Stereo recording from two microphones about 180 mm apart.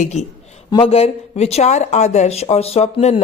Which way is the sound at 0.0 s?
40° left (ahead or behind).